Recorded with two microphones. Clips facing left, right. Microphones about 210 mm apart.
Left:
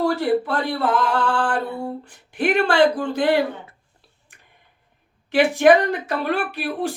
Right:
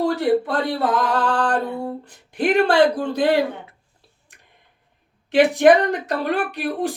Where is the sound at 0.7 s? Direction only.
20° right (ahead or behind).